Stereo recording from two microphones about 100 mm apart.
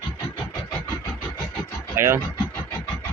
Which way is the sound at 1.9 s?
25° right (ahead or behind).